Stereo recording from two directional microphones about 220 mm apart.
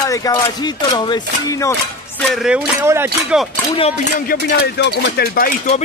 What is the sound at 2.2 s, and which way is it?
Speech, 5° right (ahead or behind).